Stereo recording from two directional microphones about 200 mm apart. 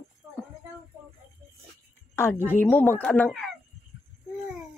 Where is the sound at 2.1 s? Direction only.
10° left (ahead or behind).